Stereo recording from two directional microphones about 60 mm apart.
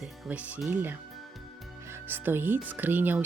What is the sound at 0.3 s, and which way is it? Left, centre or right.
Speech, right.